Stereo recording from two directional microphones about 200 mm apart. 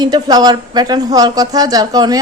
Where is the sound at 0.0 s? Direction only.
20° right (ahead or behind).